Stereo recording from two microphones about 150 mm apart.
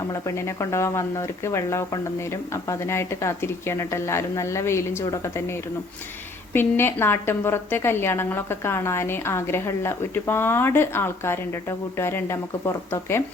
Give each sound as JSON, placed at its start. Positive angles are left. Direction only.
{"t": 0.1, "sound": "a woman's voice", "side_deg": 20}